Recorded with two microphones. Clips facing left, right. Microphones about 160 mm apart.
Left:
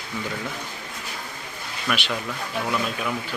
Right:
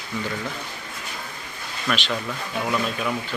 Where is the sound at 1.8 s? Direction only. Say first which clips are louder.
Right 1 dB; 10° left (ahead or behind).